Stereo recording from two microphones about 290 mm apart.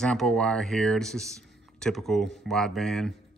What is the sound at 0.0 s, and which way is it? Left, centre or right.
Speech, centre.